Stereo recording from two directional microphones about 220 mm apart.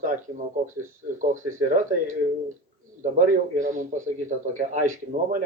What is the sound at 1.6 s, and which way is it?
Speech, 35° right (ahead or behind).